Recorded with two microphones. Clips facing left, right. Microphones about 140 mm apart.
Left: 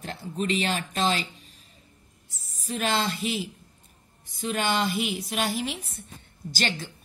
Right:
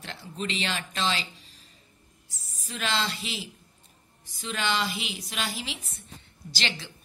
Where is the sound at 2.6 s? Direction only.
40° left (ahead or behind).